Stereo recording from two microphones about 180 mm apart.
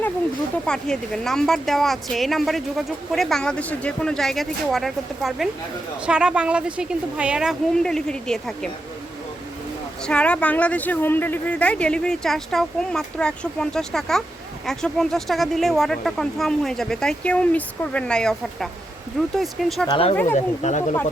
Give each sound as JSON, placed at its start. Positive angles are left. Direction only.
{"t": 0.6, "sound": "a woman's voice", "side_deg": 5}
{"t": 10.1, "sound": "a woman's voice", "side_deg": 5}
{"t": 19.9, "sound": "speech", "side_deg": 30}